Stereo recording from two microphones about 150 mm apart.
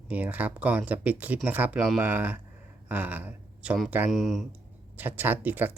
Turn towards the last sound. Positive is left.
turn(degrees=-15)  # may be behind; listen again after turning